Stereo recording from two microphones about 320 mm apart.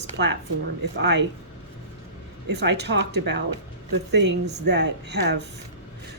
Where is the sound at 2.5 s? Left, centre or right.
Right.